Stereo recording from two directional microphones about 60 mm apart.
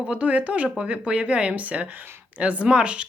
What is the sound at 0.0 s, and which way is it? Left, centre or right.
Speech, right.